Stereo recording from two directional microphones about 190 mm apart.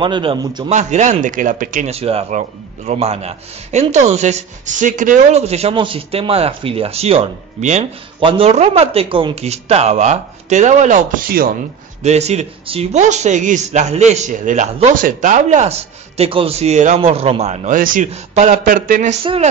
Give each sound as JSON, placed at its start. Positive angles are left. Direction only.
{"t": 0.0, "sound": "a man's voice", "side_deg": -25}
{"t": 0.7, "sound": "speech", "side_deg": -40}
{"t": 12.0, "sound": "speech", "side_deg": -35}
{"t": 19.2, "sound": "speech", "side_deg": -30}